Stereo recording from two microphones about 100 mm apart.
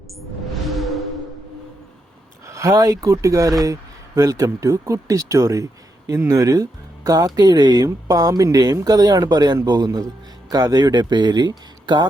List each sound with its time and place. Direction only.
0.7 s music: centre (ahead or behind)
2.5 s speech: 35° right (ahead or behind)